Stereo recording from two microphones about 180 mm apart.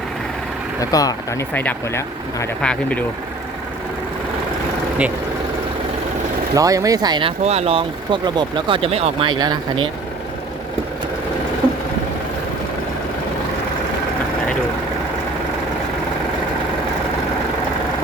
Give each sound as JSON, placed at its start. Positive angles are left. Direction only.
{"t": 0.8, "sound": "speech", "side_deg": 20}
{"t": 6.5, "sound": "speech", "side_deg": -20}